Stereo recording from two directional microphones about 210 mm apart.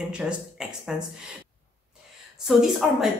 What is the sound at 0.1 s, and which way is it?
Speech, 5° right (ahead or behind).